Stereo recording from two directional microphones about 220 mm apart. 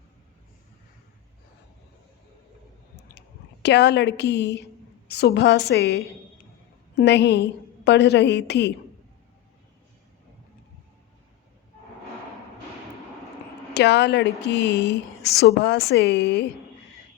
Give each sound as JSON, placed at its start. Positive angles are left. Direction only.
{"t": 2.9, "sound": "a sound", "side_deg": 50}
{"t": 5.0, "sound": "a woman's voice", "side_deg": 50}
{"t": 13.7, "sound": "a woman's voice", "side_deg": 50}